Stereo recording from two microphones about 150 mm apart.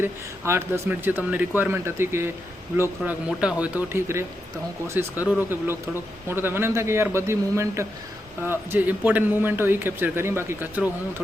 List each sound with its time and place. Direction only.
0.0 s a man's voice: 15° right (ahead or behind)